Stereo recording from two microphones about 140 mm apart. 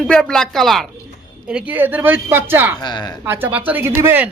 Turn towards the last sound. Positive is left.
turn(degrees=-15)  # may be behind; listen again after turning